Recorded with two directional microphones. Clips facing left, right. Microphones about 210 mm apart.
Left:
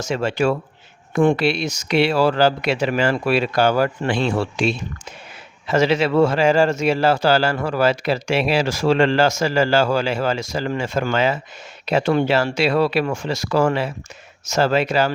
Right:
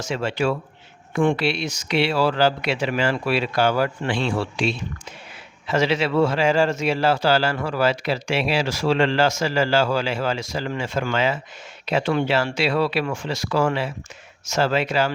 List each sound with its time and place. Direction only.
0.0 s speech: 45° left (ahead or behind)